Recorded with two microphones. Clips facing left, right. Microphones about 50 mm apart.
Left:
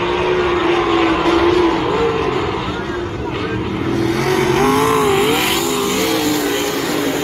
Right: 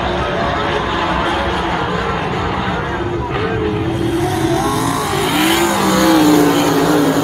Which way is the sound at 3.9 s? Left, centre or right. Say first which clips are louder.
Left 1 dB; left.